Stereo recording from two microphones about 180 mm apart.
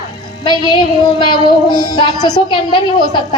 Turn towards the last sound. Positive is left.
turn(degrees=25)  # may be behind; listen again after turning